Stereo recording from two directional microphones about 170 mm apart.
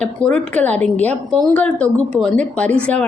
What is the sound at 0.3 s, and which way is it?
A woman's voice, 5° left (ahead or behind).